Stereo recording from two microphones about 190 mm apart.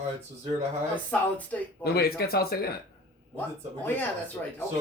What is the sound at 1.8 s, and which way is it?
Speech, 55° left (ahead or behind).